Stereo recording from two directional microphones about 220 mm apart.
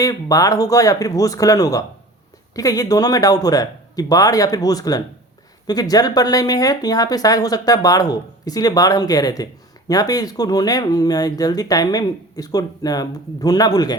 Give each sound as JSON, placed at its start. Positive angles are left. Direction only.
{"t": 0.0, "sound": "speech", "side_deg": 15}